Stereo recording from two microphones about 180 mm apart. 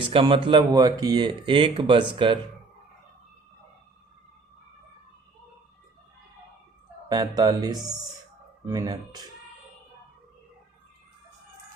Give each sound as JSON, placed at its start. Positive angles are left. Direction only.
{"t": 0.0, "sound": "speech", "side_deg": -30}
{"t": 7.1, "sound": "speech", "side_deg": -25}